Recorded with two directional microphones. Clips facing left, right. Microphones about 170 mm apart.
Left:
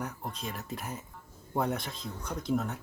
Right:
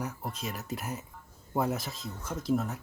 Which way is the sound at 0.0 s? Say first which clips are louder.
Right 1 dB; 5° right (ahead or behind).